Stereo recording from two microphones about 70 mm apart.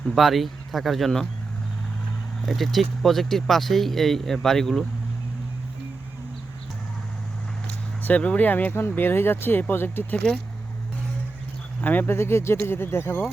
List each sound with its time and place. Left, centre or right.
0.1 s speech: centre
2.5 s speech: centre
8.0 s speech: centre
11.8 s speech: left